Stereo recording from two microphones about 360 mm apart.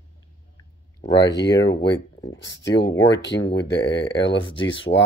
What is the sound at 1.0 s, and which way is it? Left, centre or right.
Speech, centre.